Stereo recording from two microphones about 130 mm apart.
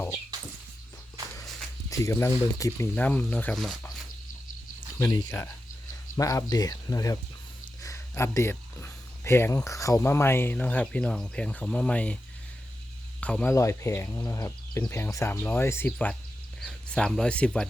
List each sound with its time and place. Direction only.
1.9 s speech: 20° left (ahead or behind)
3.5 s speech: centre (ahead or behind)
4.9 s speech: 20° left (ahead or behind)
13.5 s speech: 25° left (ahead or behind); by 17.7 s 5° left (ahead or behind)